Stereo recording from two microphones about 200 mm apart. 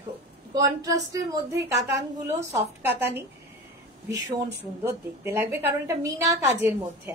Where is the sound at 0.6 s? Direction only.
15° right (ahead or behind).